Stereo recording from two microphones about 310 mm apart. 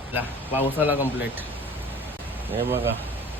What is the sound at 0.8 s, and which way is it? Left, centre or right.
Speech, centre.